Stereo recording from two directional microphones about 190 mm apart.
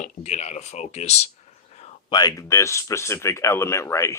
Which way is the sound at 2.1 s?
20° left (ahead or behind).